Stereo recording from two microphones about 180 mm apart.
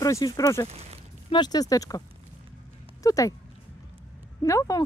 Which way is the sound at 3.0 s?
20° left (ahead or behind).